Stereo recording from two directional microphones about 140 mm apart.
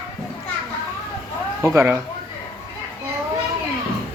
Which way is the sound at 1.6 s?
20° right (ahead or behind).